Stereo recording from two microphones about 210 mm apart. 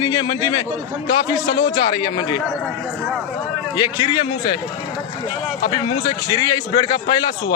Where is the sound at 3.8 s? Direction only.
20° left (ahead or behind).